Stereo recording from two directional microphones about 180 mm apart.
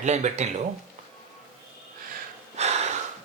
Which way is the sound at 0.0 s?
40° right (ahead or behind).